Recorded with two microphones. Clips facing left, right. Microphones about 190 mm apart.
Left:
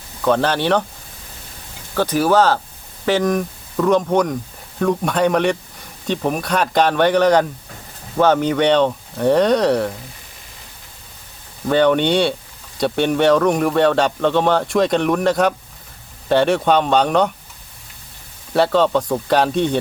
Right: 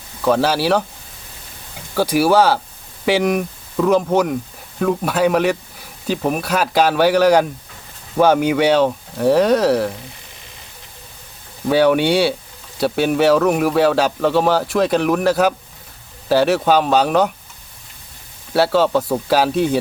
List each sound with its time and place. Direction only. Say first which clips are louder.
0.2 s speech: right 1 dB; 5° right (ahead or behind)
2.0 s speech: right 1 dB; 10° right (ahead or behind)
11.7 s speech: right 1 dB; 5° right (ahead or behind)
18.5 s speech: even; 5° right (ahead or behind)